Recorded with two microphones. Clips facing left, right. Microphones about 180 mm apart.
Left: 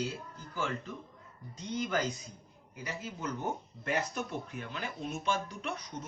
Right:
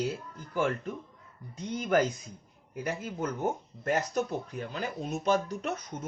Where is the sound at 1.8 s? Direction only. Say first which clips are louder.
Right 6 dB; 55° right (ahead or behind).